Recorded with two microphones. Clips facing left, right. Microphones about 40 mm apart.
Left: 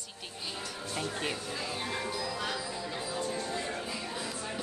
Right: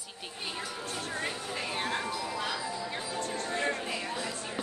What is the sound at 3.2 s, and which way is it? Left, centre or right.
Speech, right.